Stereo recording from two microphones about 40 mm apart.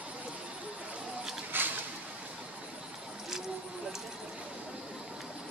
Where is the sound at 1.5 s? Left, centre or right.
Right.